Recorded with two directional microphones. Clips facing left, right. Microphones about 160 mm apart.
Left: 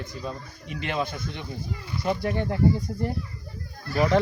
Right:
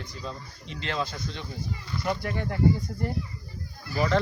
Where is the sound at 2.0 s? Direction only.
20° left (ahead or behind).